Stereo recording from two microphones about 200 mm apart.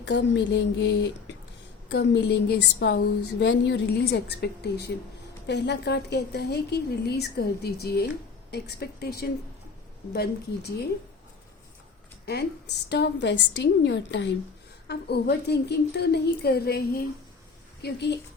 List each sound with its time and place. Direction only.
0.0 s a woman's voice: 60° left (ahead or behind)
12.2 s a woman's voice: 55° left (ahead or behind)